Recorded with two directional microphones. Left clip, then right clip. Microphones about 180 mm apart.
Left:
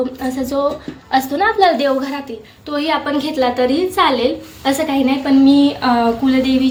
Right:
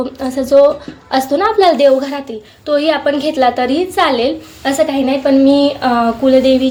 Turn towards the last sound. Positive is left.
turn(degrees=-20)  # may be behind; listen again after turning